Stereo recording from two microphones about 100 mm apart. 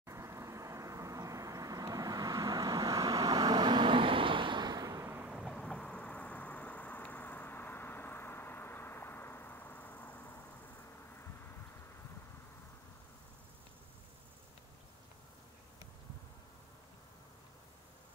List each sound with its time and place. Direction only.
0.0 s vehicle: 30° right (ahead or behind)
5.0 s a sound: 20° right (ahead or behind)
5.3 s vehicle: centre (ahead or behind); by 10.4 s 20° left (ahead or behind)